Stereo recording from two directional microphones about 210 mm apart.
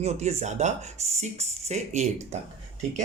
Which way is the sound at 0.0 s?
30° right (ahead or behind).